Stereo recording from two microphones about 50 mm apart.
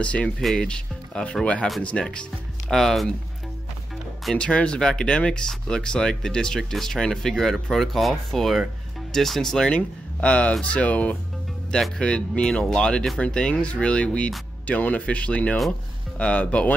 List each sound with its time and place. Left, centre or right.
0.0 s speech: left
2.7 s speech: centre
4.4 s speech: left
9.7 s speech: left